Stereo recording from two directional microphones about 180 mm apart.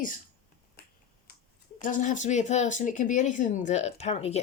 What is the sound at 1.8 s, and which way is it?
Speech, 45° left (ahead or behind).